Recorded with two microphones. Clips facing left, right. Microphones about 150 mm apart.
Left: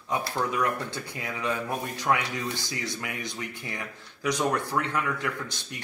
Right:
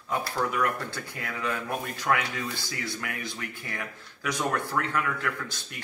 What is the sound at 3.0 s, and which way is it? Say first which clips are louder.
Speech: left 1 dB; 15° left (ahead or behind).